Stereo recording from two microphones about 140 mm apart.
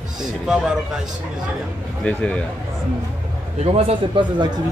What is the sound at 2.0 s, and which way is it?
Speech, 10° left (ahead or behind).